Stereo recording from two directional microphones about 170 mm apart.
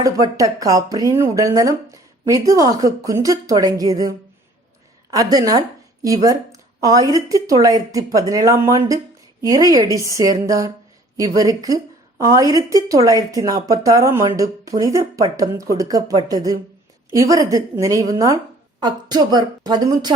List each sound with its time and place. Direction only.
0.0 s a woman's voice: 20° right (ahead or behind)
5.1 s a woman's voice: 20° right (ahead or behind)